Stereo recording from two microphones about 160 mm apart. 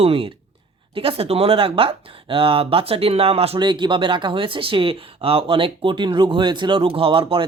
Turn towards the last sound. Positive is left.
turn(degrees=-35)  # may be behind; listen again after turning